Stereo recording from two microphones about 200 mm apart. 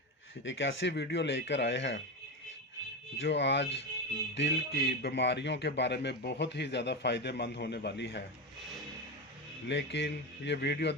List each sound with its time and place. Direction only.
0.4 s speech: 65° left (ahead or behind)
3.2 s speech: 60° left (ahead or behind)
9.6 s speech: 60° left (ahead or behind)